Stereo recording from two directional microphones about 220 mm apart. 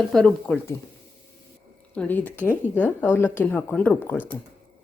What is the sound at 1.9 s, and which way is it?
Speech, 5° left (ahead or behind).